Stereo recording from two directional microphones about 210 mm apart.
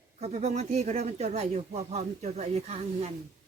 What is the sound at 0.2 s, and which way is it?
Speech, 30° right (ahead or behind).